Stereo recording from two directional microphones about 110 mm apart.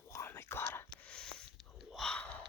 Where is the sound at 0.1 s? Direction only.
25° left (ahead or behind).